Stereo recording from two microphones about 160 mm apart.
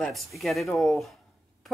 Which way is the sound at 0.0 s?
Centre (ahead or behind).